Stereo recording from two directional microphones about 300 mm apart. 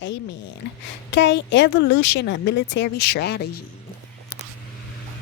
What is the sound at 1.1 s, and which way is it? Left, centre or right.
A woman's voice, left.